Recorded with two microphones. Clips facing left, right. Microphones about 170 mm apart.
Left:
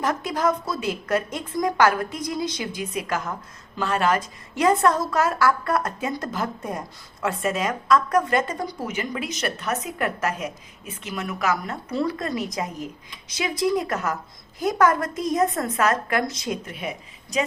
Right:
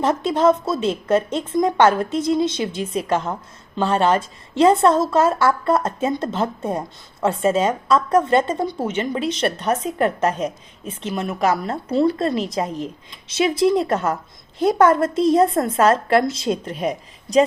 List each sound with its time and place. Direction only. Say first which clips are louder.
0.0 s a woman's voice: right 6 dB; 25° right (ahead or behind)